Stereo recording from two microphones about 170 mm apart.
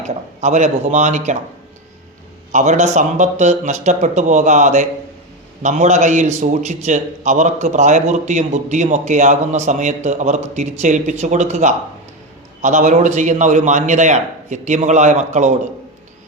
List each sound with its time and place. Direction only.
0.0 s a man's voice: 45° right (ahead or behind)
2.5 s a man's voice: 45° right (ahead or behind)